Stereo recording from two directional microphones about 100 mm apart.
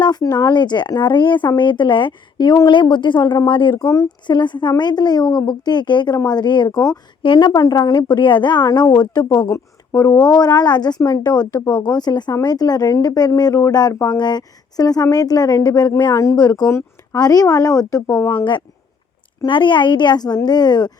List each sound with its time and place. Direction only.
0.0 s speech: 40° left (ahead or behind)
17.2 s speech: 40° left (ahead or behind)
18.1 s speech: 15° left (ahead or behind)
19.5 s speech: 55° left (ahead or behind)